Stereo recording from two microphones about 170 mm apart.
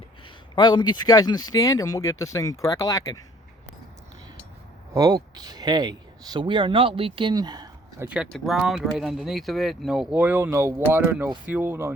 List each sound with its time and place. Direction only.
0.5 s speech: 25° left (ahead or behind)
4.9 s speech: 20° right (ahead or behind)
8.0 s speech: 5° right (ahead or behind)